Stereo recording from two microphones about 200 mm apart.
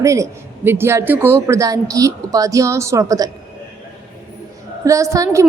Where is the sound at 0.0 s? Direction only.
15° right (ahead or behind).